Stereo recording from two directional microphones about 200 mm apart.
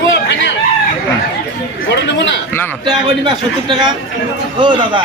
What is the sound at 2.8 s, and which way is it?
A man's voice, 20° right (ahead or behind).